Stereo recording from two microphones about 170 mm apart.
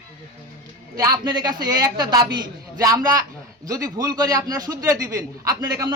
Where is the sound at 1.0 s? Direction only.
20° right (ahead or behind).